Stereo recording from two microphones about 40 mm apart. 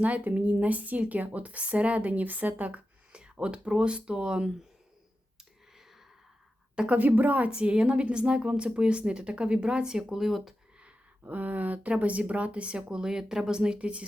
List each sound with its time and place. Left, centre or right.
0.0 s a woman's voice: right
3.1 s a sound: right
3.3 s a woman's voice: right
5.7 s whispering: centre
6.8 s a woman's voice: right
7.5 s a woman's voice: right
9.8 s speech: centre
10.2 s speech: centre
11.2 s a woman's voice: right